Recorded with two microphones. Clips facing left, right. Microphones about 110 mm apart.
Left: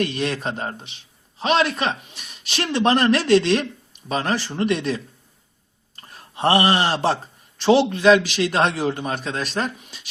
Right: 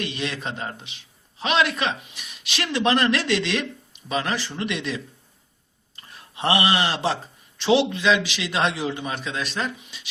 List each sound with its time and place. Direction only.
0.0 s a man's voice: 45° left (ahead or behind)
6.0 s a man's voice: 45° left (ahead or behind)